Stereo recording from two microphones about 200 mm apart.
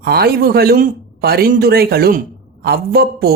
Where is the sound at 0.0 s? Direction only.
50° right (ahead or behind).